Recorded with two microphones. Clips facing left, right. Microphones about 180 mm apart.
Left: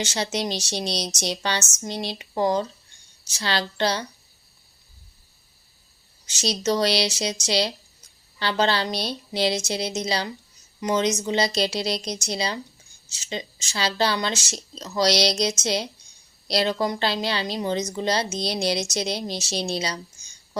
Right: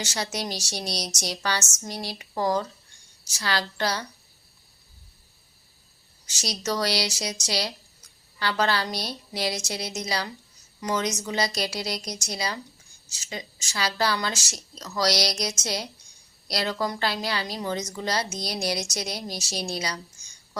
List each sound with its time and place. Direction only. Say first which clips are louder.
0.0 s a woman's voice: left 4 dB; 25° left (ahead or behind)
6.2 s a woman's voice: left 6 dB; 25° left (ahead or behind)